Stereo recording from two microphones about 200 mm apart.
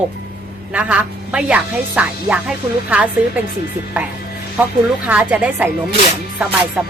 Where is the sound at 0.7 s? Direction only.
5° right (ahead or behind).